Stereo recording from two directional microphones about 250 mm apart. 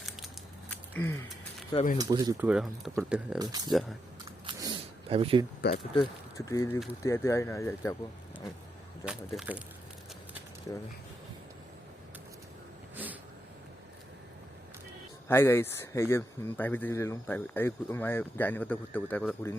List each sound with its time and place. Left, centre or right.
0.7 s a sound: centre
1.7 s speech: left
2.0 s speech: centre
3.3 s speech: centre
4.3 s a sound: centre
5.9 s speech: centre
9.0 s speech: centre
13.0 s cat: centre
15.3 s speech: centre